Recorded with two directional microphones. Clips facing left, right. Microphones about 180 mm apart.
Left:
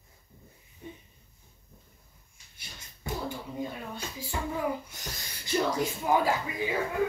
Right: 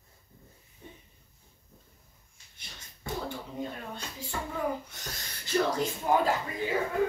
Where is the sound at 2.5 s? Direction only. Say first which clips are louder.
Left 1 dB; 10° left (ahead or behind).